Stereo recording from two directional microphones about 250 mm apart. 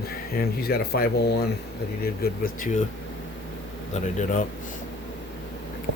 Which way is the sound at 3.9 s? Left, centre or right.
Left.